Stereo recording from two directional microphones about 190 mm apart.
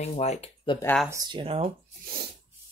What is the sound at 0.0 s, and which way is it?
Speech, 35° left (ahead or behind).